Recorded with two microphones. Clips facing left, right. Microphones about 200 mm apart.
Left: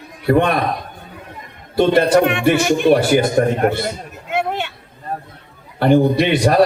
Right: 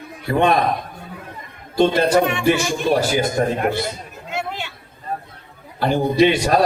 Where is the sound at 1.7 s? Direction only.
60° left (ahead or behind).